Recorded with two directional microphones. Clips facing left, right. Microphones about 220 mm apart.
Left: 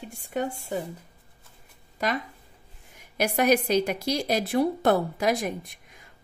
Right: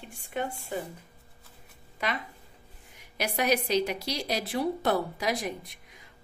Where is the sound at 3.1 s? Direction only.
50° left (ahead or behind).